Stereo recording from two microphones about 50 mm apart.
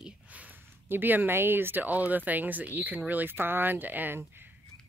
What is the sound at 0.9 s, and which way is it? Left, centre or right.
Speech, right.